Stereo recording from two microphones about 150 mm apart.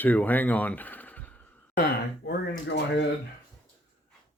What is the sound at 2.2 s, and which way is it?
Speech, 90° left.